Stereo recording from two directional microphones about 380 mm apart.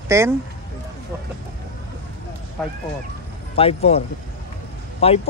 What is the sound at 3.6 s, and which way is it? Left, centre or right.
Speech, centre.